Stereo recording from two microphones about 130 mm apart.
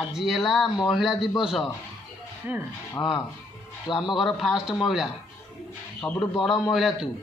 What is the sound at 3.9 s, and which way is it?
Speech, 35° left (ahead or behind).